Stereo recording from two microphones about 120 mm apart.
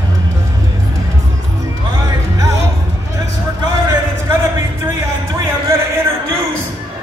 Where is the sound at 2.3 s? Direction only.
25° right (ahead or behind).